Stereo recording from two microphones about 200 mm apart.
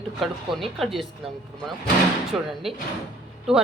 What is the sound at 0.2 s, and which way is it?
Speech, centre (ahead or behind).